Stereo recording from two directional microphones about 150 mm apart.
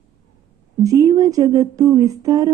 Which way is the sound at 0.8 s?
25° right (ahead or behind).